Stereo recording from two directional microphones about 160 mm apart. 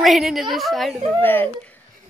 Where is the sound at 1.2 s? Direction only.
10° left (ahead or behind).